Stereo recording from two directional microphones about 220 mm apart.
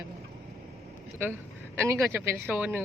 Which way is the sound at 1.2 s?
10° right (ahead or behind).